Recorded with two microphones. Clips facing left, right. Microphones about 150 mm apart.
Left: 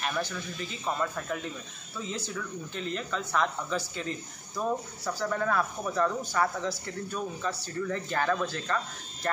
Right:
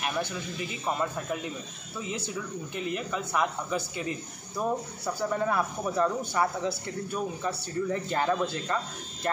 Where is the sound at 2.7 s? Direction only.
10° right (ahead or behind).